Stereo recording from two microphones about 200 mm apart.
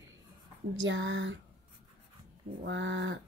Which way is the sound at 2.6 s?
65° right (ahead or behind).